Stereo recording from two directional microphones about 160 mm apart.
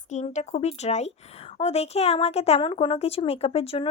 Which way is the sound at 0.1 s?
45° left (ahead or behind).